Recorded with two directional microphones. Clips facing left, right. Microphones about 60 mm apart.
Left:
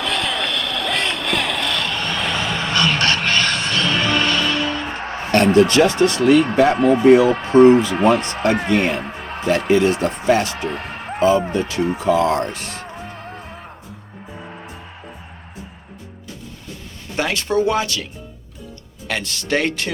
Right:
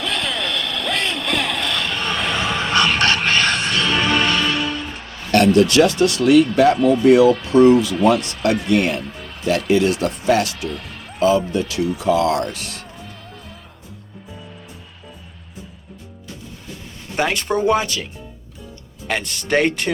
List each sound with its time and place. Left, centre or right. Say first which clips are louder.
0.0 s a sound: left 2 dB; centre
2.6 s music: right 1 dB; right
4.6 s speech: left 3 dB; left
12.9 s music: left 5 dB; left
17.2 s speech: even; centre